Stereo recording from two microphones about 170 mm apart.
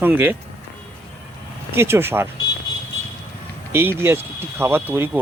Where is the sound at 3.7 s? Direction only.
15° right (ahead or behind).